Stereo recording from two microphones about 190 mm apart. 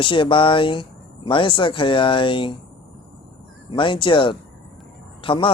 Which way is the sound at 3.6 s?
25° left (ahead or behind).